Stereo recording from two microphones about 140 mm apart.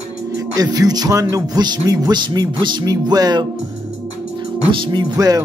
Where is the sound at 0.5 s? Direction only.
25° right (ahead or behind).